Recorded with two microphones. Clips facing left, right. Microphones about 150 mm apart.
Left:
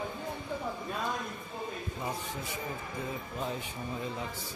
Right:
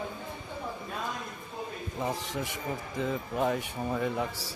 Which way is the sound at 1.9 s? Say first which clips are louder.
Right 7 dB; 80° right.